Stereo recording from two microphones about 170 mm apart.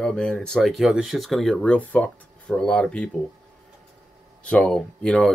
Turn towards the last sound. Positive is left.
turn(degrees=5)  # may be behind; listen again after turning